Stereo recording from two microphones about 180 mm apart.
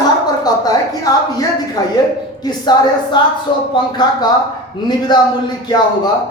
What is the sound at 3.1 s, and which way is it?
Speech, 25° left (ahead or behind).